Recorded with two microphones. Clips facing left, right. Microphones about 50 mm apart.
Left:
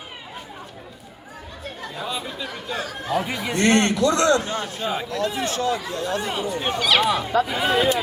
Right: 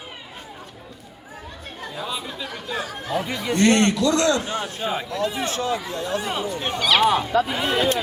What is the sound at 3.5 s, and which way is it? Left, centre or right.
Speech, left.